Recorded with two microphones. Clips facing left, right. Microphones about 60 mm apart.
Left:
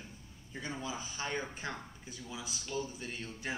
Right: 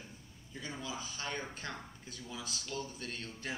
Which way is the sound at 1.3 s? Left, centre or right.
Centre.